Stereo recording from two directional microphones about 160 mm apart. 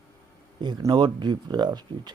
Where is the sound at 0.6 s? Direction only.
25° right (ahead or behind).